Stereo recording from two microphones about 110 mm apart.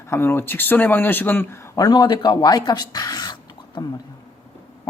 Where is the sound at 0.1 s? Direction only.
20° left (ahead or behind).